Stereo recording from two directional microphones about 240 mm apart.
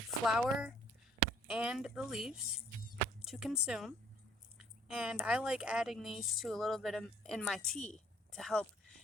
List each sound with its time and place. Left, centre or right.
0.3 s speech: centre